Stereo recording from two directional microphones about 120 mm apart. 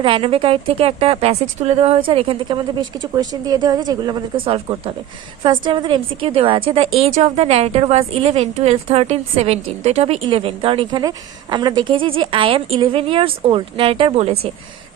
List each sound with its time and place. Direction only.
0.0 s a woman's voice: 45° right (ahead or behind)
4.4 s a woman's voice: 50° right (ahead or behind)
10.2 s a woman's voice: 50° right (ahead or behind)
11.0 s a woman's voice: 35° right (ahead or behind); by 14.5 s 55° right (ahead or behind)